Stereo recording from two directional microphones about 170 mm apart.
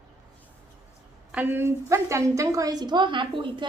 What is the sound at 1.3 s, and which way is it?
A woman's voice, 10° right (ahead or behind).